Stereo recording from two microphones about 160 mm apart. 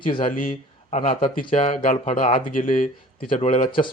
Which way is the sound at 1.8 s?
55° left (ahead or behind).